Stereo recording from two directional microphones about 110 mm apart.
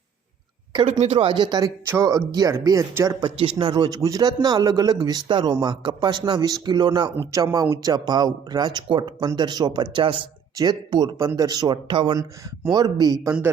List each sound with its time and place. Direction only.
0.7 s speech: 55° right (ahead or behind); by 3.2 s 25° right (ahead or behind)
3.6 s speech: 40° right (ahead or behind)
10.6 s speech: 40° right (ahead or behind)
12.7 s speech: 40° right (ahead or behind)